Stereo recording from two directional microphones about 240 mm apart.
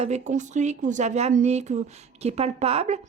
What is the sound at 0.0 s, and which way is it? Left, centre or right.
A woman's voice, right.